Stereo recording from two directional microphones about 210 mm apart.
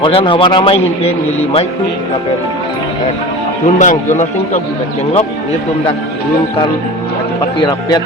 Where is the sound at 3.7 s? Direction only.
35° left (ahead or behind).